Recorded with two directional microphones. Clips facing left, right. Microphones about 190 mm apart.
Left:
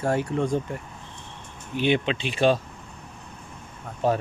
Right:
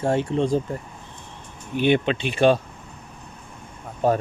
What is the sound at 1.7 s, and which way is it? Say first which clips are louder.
Speech: right 3 dB; 50° right (ahead or behind).